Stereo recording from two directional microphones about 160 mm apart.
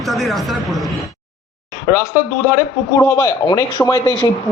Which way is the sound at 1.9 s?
15° left (ahead or behind).